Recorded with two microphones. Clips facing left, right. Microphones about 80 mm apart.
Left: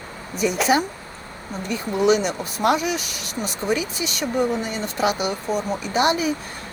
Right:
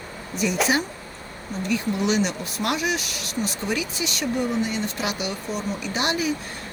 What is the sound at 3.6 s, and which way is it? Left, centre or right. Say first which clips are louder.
Speech: left 3 dB; left.